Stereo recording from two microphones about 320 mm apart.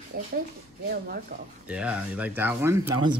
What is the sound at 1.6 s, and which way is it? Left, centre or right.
Speech, centre.